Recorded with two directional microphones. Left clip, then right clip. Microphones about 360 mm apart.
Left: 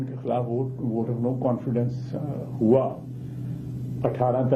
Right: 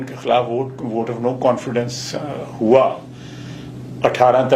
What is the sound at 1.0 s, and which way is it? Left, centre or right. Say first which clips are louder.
Speech: right 11 dB; centre.